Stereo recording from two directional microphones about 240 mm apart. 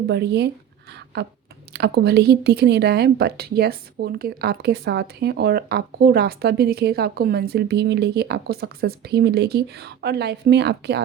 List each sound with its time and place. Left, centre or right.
0.1 s speech: right
1.7 s a woman's voice: right